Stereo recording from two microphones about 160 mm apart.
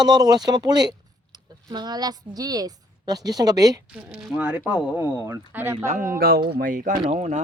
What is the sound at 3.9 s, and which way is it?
Speech, 10° right (ahead or behind).